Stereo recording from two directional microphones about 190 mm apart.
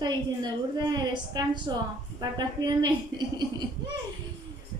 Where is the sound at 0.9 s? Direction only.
20° right (ahead or behind).